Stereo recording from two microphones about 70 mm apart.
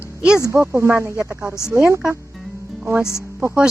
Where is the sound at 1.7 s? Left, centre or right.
Right.